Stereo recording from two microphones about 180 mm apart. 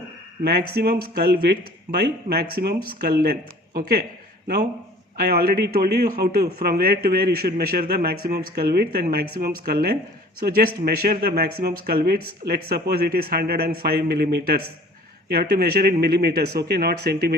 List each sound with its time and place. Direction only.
0.4 s a man's voice: 60° right (ahead or behind)
5.1 s a man's voice: 55° right (ahead or behind)